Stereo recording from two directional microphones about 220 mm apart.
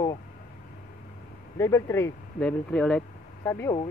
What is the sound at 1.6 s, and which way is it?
Speech, 15° left (ahead or behind).